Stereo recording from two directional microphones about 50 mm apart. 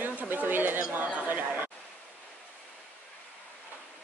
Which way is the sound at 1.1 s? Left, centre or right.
Right.